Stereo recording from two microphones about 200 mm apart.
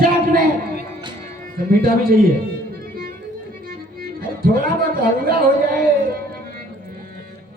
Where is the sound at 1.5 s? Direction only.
45° right (ahead or behind).